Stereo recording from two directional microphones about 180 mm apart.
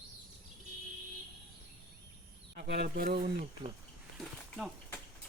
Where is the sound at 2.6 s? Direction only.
60° right (ahead or behind).